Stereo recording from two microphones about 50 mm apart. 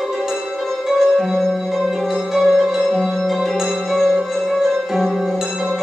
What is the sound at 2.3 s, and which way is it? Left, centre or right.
Music, centre.